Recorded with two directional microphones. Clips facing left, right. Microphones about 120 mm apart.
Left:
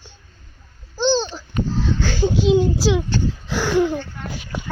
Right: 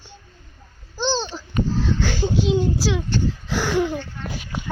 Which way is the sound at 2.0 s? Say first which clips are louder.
Left 2 dB; centre (ahead or behind).